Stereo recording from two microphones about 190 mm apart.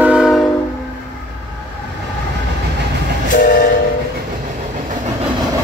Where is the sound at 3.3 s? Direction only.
45° left (ahead or behind).